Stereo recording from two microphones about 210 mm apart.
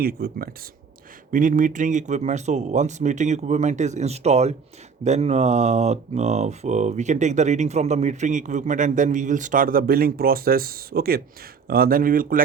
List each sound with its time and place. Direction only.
0.0 s speech: 45° right (ahead or behind)